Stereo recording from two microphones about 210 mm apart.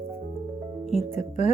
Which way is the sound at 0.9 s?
30° left (ahead or behind).